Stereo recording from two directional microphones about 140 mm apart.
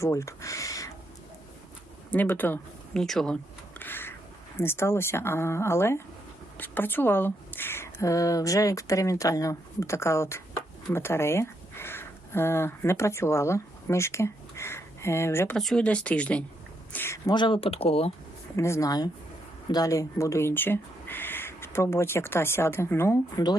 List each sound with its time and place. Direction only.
0.0 s speech: 20° left (ahead or behind)
2.0 s speech: 10° left (ahead or behind)
3.8 s crow: 15° left (ahead or behind)
4.6 s speech: 15° left (ahead or behind)
15.5 s speech: 5° left (ahead or behind)
17.2 s speech: 30° left (ahead or behind)
18.5 s speech: 20° left (ahead or behind)